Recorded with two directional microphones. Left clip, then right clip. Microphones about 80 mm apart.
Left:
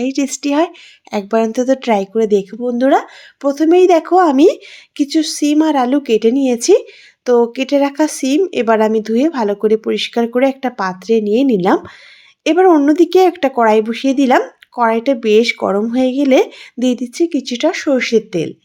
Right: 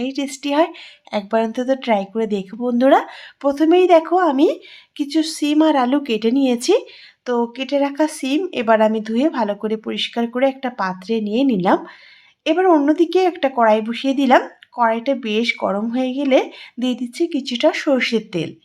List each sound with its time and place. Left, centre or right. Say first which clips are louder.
0.0 s speech: left 6 dB; left
2.1 s speech: left 8 dB; left
2.6 s speech: right 1 dB; centre
3.8 s speech: left 3 dB; left
4.2 s speech: left 5 dB; left
5.1 s speech: left 3 dB; left
7.3 s speech: left 8 dB; left
12.9 s speech: left 5 dB; left
13.6 s speech: left 3 dB; left
14.8 s speech: left 7 dB; left
15.5 s speech: left 5 dB; left
15.9 s speech: left 4 dB; left
16.9 s speech: left 4 dB; left